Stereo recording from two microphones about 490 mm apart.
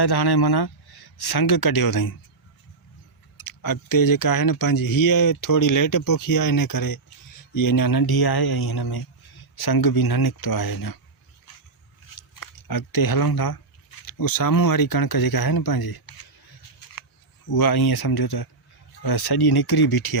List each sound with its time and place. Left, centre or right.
0.0 s speech: left
3.4 s speech: left
12.3 s speech: left
17.5 s speech: left